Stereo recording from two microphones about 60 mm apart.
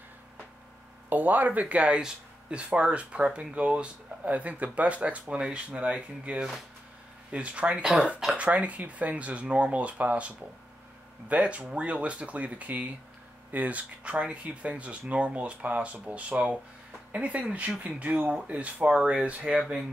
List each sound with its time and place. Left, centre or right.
1.1 s speech: right